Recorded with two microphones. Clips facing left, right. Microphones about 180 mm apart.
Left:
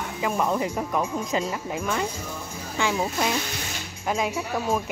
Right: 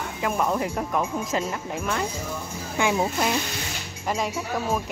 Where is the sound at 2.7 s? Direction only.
15° right (ahead or behind).